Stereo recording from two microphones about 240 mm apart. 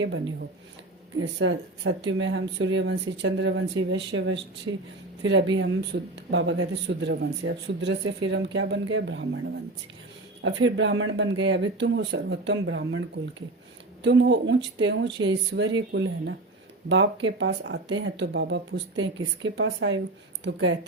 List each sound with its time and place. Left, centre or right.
0.0 s speech: right
4.7 s speech: right
5.2 s speech: right
10.4 s speech: right
14.0 s speech: right